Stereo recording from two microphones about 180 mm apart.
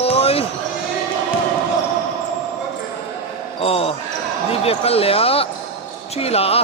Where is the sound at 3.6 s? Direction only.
30° left (ahead or behind).